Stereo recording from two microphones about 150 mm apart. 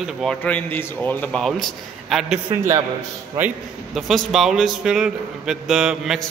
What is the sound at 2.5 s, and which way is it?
Speech, 15° right (ahead or behind).